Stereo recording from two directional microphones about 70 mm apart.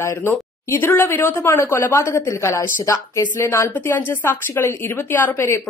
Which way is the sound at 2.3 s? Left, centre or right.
Left.